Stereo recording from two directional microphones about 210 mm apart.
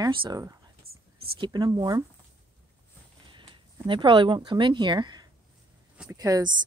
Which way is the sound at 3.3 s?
25° right (ahead or behind).